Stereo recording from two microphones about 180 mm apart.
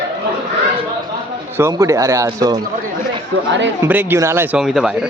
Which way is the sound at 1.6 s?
15° right (ahead or behind).